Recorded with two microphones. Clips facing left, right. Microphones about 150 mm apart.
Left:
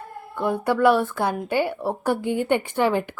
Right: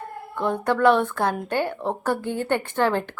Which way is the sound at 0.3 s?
10° left (ahead or behind).